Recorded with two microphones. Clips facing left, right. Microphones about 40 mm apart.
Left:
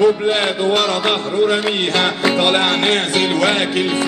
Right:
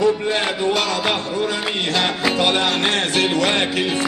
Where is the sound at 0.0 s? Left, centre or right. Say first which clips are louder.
Left 4 dB; left.